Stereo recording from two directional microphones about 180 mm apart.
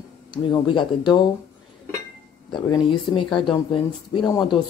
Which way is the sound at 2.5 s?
25° left (ahead or behind).